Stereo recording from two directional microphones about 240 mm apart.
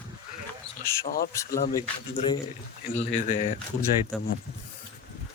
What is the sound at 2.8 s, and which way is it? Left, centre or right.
Speech, left.